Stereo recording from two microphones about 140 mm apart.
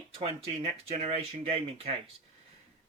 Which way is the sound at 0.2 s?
45° right (ahead or behind).